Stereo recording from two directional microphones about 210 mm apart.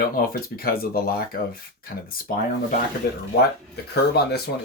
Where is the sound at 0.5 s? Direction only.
45° left (ahead or behind).